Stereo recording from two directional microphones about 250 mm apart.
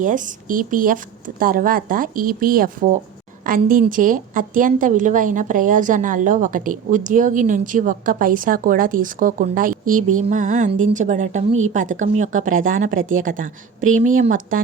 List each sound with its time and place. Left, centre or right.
0.0 s a woman's voice: right